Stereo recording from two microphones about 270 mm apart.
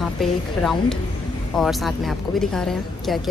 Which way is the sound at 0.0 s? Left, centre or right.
Centre.